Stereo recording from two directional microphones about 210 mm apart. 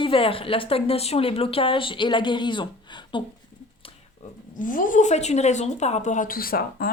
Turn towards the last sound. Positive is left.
turn(degrees=45)  # may be behind; listen again after turning